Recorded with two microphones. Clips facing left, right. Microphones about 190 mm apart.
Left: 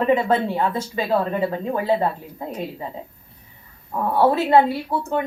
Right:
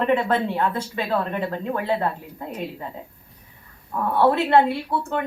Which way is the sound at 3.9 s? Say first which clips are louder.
Left 1 dB; 20° left (ahead or behind).